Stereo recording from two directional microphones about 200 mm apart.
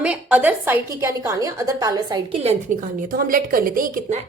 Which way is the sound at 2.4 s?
35° right (ahead or behind).